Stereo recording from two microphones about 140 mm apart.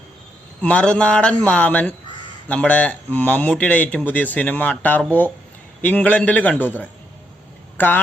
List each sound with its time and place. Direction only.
0.6 s speech: 10° left (ahead or behind)